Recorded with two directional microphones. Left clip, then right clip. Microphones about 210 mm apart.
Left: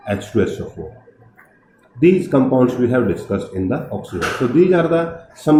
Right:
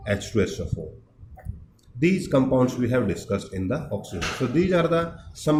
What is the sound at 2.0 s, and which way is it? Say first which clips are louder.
Speech: left 8 dB; 50° right (ahead or behind).